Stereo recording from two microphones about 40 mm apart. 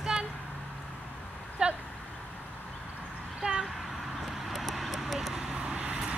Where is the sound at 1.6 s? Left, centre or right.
Right.